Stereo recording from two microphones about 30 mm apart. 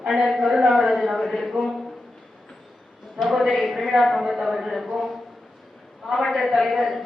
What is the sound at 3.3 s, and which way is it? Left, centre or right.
A man's voice, centre.